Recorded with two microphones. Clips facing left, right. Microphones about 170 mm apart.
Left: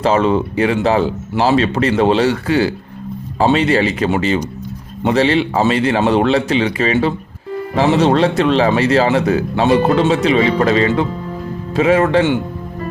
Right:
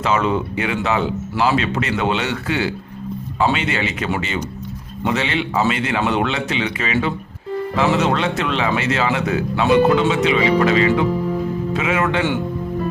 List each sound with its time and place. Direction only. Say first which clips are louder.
0.0 s speech: left 5 dB; 35° left (ahead or behind)